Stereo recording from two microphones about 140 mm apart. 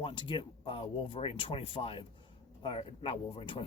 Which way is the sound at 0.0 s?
35° left (ahead or behind).